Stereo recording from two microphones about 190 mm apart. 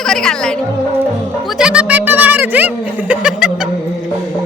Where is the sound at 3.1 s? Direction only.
5° right (ahead or behind).